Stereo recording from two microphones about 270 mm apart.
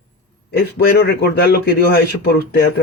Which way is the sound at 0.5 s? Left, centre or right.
Left.